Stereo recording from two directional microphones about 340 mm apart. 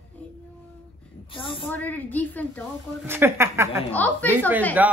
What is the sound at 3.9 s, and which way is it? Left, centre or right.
Speech, centre.